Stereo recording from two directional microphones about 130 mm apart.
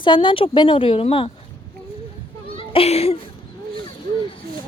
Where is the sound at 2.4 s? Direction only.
45° left (ahead or behind).